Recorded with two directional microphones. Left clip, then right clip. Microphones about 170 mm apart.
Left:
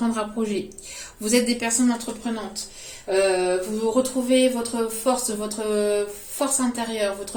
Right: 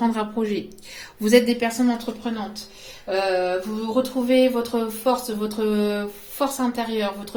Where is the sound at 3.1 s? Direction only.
40° right (ahead or behind).